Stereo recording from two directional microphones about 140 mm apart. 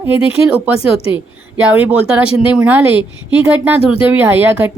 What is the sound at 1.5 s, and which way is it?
Speech, 10° right (ahead or behind).